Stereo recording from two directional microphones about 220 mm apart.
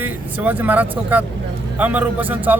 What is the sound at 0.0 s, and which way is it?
Speech, 10° right (ahead or behind).